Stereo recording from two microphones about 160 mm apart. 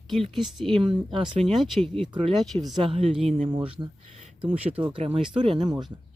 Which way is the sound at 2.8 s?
35° right (ahead or behind).